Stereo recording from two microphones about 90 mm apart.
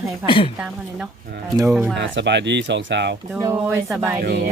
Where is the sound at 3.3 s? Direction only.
30° right (ahead or behind).